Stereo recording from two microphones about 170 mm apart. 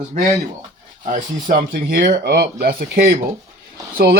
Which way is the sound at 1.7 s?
60° right (ahead or behind).